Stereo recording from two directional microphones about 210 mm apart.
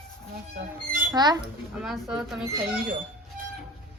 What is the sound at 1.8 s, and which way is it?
Speech, centre (ahead or behind).